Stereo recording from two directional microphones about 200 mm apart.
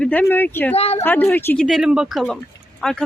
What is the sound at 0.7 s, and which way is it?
Speech, 30° left (ahead or behind).